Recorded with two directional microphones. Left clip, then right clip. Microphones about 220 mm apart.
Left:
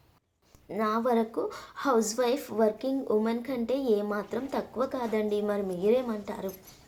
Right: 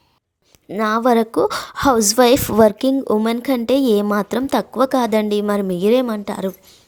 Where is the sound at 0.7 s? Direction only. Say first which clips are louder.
Right 11 dB; 45° right (ahead or behind).